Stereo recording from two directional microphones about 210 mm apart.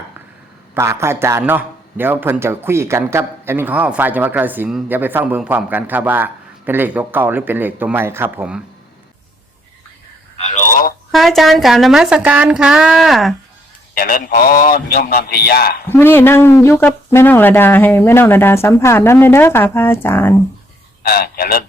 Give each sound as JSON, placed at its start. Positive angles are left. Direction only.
{"t": 0.7, "sound": "a man's voice", "side_deg": -15}
{"t": 10.5, "sound": "telephone", "side_deg": 40}
{"t": 11.1, "sound": "a woman's voice", "side_deg": 0}
{"t": 13.9, "sound": "a man's voice", "side_deg": 45}
{"t": 15.9, "sound": "speech", "side_deg": 10}
{"t": 21.0, "sound": "a man's voice", "side_deg": 45}